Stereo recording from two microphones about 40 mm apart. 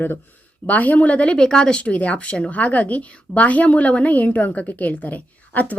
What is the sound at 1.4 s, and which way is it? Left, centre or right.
Speech, centre.